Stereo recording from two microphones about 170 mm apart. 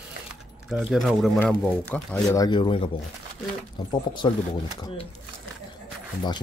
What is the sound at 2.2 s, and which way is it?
Speech, 20° left (ahead or behind).